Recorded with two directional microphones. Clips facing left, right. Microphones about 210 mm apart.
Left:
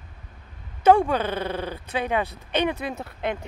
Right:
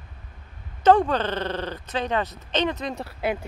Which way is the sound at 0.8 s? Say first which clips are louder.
Even; 10° left (ahead or behind).